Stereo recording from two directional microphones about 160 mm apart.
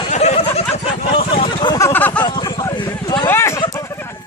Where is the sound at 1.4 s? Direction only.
30° left (ahead or behind).